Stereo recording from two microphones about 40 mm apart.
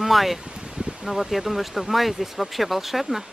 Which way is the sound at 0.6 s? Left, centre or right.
Right.